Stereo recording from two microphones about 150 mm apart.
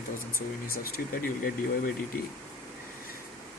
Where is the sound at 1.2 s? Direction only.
70° left (ahead or behind).